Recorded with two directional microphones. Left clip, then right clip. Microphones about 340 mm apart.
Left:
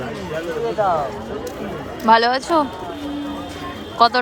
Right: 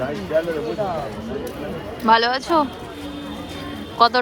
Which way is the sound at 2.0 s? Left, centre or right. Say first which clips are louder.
Left 2 dB; centre.